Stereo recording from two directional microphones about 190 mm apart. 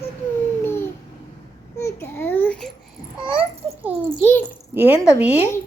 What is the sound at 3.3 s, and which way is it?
Babbling, 10° right (ahead or behind).